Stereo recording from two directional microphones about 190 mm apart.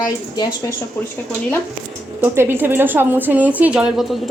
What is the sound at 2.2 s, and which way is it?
A woman's voice, 10° right (ahead or behind).